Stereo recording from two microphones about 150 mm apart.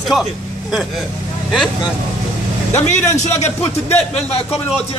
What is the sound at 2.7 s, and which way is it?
A man's voice, 50° left (ahead or behind).